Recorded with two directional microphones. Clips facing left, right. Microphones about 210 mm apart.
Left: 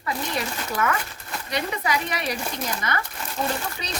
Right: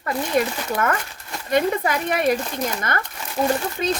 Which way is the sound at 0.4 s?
50° right (ahead or behind).